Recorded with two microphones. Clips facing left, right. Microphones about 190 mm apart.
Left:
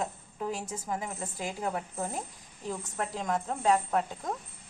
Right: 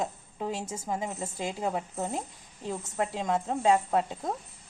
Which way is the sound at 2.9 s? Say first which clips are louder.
Right 4 dB; 25° right (ahead or behind).